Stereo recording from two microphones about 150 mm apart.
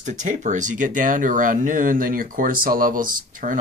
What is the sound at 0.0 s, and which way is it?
Speech, 55° right (ahead or behind).